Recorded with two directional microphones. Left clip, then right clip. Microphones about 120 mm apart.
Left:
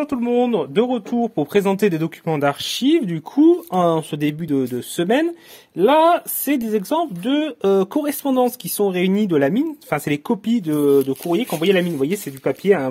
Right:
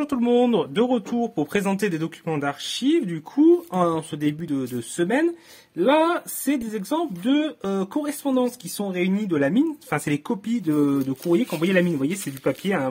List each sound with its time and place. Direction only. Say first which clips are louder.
0.2 s speech: even; 20° left (ahead or behind)
1.8 s speech: left 6 dB; 40° left (ahead or behind)
2.4 s speech: left 7 dB; 55° left (ahead or behind)
9.8 s speech: left 4 dB; 40° left (ahead or behind)